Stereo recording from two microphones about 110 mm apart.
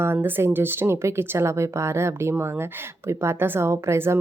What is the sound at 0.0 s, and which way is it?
Speech, 20° right (ahead or behind).